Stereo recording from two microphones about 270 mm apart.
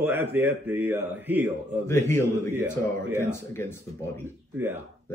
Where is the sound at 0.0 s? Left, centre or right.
Centre.